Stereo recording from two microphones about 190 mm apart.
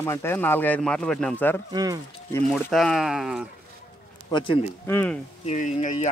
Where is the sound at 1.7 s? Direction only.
20° right (ahead or behind).